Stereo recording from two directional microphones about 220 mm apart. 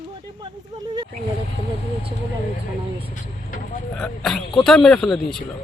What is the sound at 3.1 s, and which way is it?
Vehicle, 35° left (ahead or behind).